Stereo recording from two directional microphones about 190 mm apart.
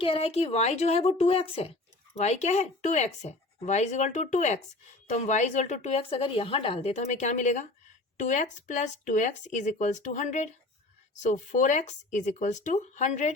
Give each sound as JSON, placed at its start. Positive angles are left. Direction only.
{"t": 0.0, "sound": "speech", "side_deg": 30}